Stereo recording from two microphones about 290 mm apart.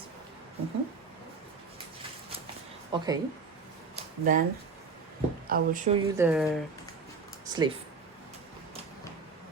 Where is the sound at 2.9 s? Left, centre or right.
Centre.